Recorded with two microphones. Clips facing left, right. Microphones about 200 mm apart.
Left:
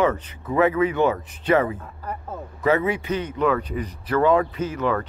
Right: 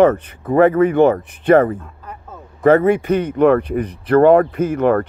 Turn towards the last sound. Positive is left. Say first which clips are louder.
# right 8 dB
turn(degrees=-55)  # may be behind; listen again after turning